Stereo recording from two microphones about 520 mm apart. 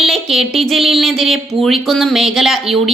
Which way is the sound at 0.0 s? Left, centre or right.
Centre.